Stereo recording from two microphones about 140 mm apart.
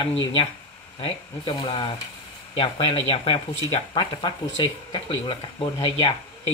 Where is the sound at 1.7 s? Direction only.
35° left (ahead or behind).